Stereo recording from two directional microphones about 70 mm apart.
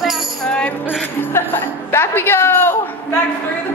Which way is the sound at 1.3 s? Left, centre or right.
Left.